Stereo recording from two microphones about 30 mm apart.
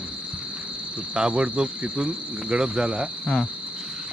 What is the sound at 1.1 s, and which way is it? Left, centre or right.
Speech, right.